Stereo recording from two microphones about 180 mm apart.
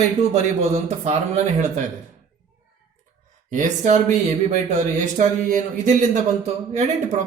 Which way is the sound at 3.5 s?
40° right (ahead or behind).